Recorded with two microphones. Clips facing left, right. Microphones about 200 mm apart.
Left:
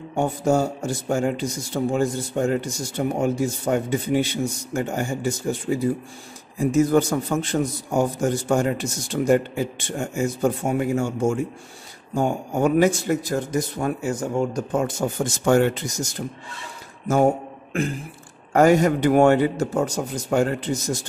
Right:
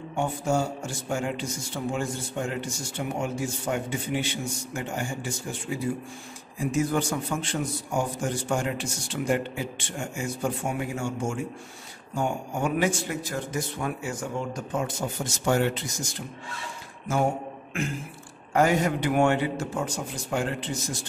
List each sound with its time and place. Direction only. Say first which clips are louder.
0.1 s speech: left 6 dB; 40° left (ahead or behind)
18.5 s speech: left 7 dB; 45° left (ahead or behind)